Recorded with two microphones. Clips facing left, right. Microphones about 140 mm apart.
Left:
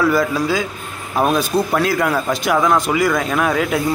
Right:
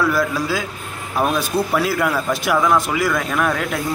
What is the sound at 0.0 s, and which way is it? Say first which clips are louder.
Speech: left 3 dB; centre (ahead or behind).